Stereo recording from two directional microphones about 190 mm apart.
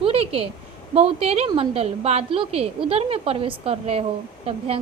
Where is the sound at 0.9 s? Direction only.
30° right (ahead or behind).